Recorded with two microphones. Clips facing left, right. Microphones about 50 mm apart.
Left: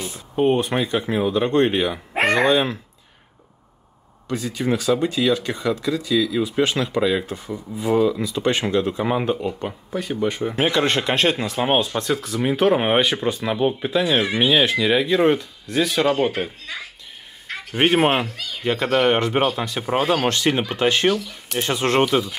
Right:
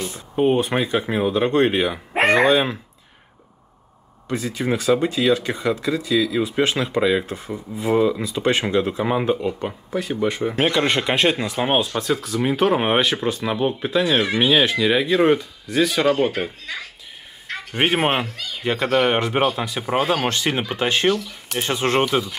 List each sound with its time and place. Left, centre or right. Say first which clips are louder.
0.0 s speech: even; centre
0.6 s speech: right 1 dB; centre
4.3 s speech: even; centre
8.9 s speech: right 1 dB; centre
21.6 s speech: even; right
22.0 s speech: left 1 dB; centre